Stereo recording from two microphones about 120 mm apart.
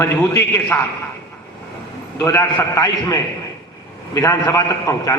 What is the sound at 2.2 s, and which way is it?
A man's voice, 20° left (ahead or behind).